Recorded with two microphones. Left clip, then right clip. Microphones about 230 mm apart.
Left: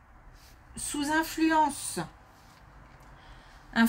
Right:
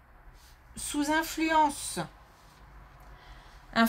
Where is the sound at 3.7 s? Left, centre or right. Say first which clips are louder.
Right 1 dB; right.